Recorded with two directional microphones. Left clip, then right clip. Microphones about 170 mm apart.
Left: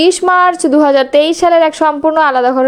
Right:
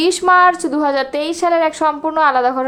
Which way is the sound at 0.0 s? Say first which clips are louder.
Left 2 dB; 25° left (ahead or behind).